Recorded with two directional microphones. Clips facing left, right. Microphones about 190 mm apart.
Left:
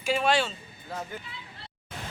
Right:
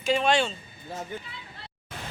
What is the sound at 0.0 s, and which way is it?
Speech, 5° left (ahead or behind).